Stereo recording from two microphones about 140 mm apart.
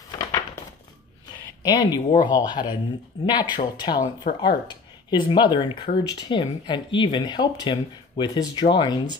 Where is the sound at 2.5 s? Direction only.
30° left (ahead or behind).